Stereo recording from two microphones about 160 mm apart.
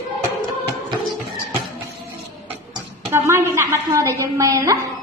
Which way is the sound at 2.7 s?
15° right (ahead or behind).